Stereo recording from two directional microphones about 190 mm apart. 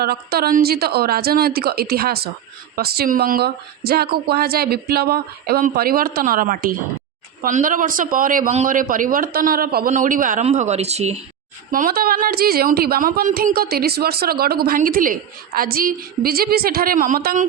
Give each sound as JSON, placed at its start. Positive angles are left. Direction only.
{"t": 0.0, "sound": "a woman's voice", "side_deg": -55}
{"t": 11.7, "sound": "a woman's voice", "side_deg": -50}